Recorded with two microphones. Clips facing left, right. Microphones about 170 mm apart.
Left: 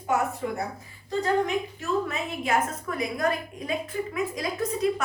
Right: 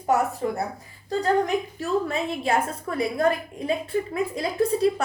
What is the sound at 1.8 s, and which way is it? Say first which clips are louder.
A woman's voice: right 3 dB; 30° right (ahead or behind).